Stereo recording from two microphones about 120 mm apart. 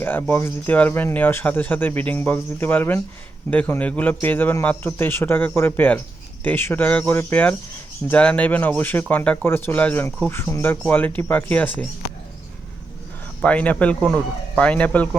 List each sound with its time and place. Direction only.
0.0 s speech: 20° left (ahead or behind)
13.4 s speech: 10° left (ahead or behind)